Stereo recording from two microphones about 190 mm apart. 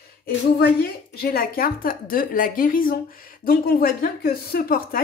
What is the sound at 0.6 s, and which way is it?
Speech, 55° left (ahead or behind).